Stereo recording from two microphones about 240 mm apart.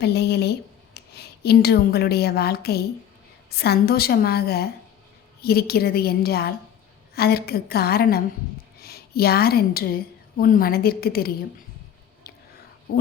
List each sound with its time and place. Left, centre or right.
0.0 s a woman's voice: left